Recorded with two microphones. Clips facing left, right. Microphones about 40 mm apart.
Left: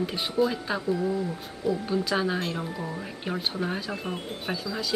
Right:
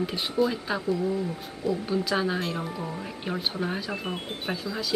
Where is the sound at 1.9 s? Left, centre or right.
Centre.